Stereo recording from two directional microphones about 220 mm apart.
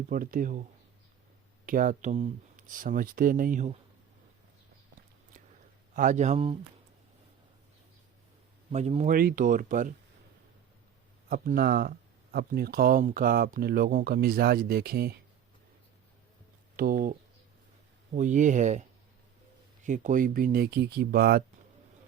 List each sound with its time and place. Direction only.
0.1 s speech: 40° right (ahead or behind)
1.6 s speech: 40° right (ahead or behind)
5.9 s speech: 35° right (ahead or behind)
8.7 s speech: 30° right (ahead or behind)
11.3 s speech: 40° right (ahead or behind)
16.7 s speech: 40° right (ahead or behind)